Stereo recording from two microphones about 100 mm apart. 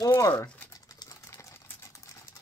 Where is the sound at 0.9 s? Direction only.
35° left (ahead or behind).